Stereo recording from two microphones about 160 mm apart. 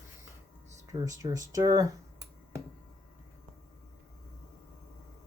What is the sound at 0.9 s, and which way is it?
Speech, 20° right (ahead or behind).